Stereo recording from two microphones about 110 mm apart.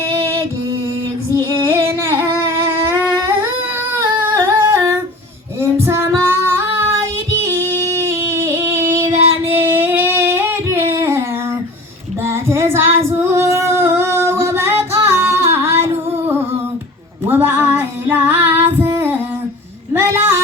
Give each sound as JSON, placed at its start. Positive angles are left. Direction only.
{"t": 1.5, "sound": "female singing", "side_deg": -25}
{"t": 2.2, "sound": "a sound", "side_deg": -25}
{"t": 4.4, "sound": "humming", "side_deg": -25}
{"t": 5.5, "sound": "child singing", "side_deg": -25}
{"t": 9.5, "sound": "singing", "side_deg": -20}
{"t": 12.2, "sound": "child singing", "side_deg": -25}
{"t": 13.1, "sound": "singing", "side_deg": -25}
{"t": 17.2, "sound": "child singing", "side_deg": -20}
{"t": 18.8, "sound": "female singing", "side_deg": -20}
{"t": 19.9, "sound": "a sound", "side_deg": -25}